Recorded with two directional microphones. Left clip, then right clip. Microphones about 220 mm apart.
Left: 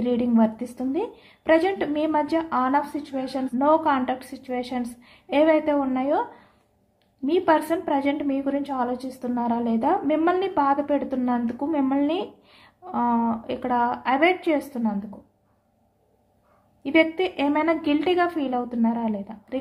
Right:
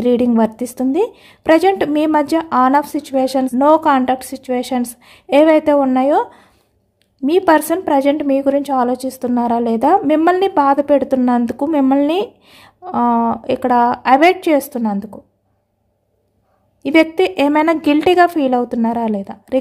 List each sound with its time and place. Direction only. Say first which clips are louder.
0.0 s a woman's voice: right 9 dB; 55° right (ahead or behind)
16.8 s a woman's voice: right 8 dB; 55° right (ahead or behind)